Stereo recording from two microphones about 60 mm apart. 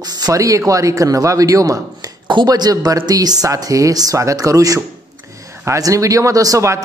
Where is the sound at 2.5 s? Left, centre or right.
Right.